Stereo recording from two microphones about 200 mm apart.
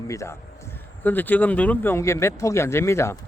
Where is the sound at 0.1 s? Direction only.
15° left (ahead or behind).